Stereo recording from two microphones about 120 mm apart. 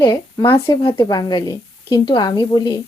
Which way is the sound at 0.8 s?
45° left (ahead or behind).